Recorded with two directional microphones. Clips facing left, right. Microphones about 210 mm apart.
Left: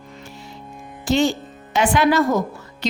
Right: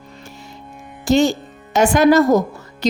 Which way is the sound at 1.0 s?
40° right (ahead or behind).